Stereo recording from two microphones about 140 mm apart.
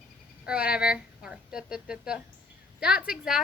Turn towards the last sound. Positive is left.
turn(degrees=-5)  # may be behind; listen again after turning